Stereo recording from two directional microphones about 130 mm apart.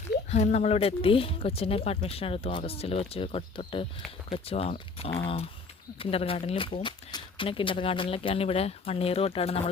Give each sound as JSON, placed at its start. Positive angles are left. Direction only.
{"t": 0.3, "sound": "speech", "side_deg": 55}